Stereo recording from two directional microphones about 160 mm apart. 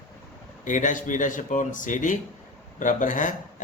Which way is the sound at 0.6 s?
50° left (ahead or behind).